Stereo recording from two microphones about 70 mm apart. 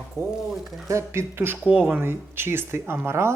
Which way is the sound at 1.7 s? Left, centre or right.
Right.